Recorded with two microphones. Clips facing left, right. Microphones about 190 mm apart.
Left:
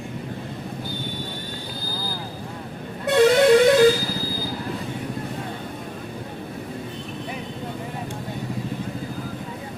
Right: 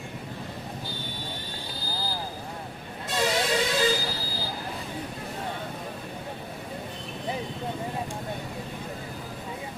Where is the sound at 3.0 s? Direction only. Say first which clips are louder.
Left 12 dB; 60° left (ahead or behind).